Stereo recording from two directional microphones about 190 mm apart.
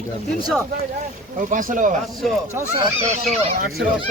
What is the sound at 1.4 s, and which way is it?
Speech, 45° right (ahead or behind).